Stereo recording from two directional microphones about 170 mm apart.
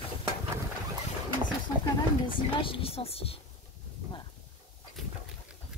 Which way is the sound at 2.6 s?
30° left (ahead or behind).